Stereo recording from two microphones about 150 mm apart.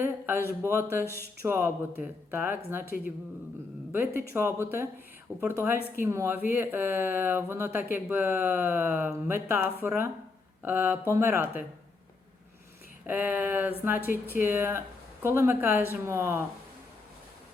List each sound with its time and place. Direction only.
0.0 s speech: 15° right (ahead or behind)
3.9 s speech: 15° right (ahead or behind)
13.1 s speech: 10° right (ahead or behind)